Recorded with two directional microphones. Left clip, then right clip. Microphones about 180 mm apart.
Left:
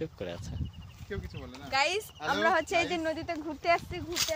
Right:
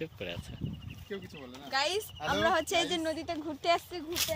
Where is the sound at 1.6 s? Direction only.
20° left (ahead or behind).